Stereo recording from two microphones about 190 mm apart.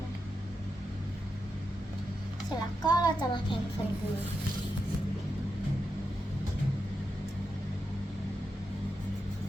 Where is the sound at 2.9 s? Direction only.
20° left (ahead or behind).